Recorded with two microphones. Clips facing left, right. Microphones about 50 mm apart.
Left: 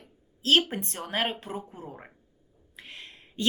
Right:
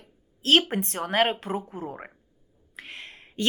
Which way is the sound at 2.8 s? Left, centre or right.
Right.